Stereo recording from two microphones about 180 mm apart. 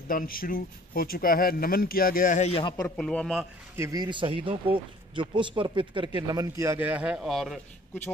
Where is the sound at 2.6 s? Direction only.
25° left (ahead or behind).